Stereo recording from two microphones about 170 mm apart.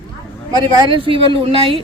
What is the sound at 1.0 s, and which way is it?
Speech, 30° right (ahead or behind).